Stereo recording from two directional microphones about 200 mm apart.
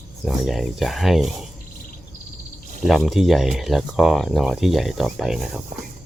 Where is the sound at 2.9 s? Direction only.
Centre (ahead or behind).